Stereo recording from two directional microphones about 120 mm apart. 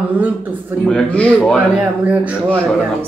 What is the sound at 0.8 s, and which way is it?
Speech, 10° left (ahead or behind).